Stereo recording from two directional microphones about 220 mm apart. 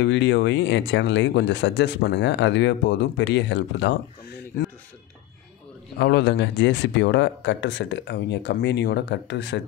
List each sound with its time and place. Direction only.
0.0 s speech: 55° left (ahead or behind)
5.9 s speech: 50° left (ahead or behind)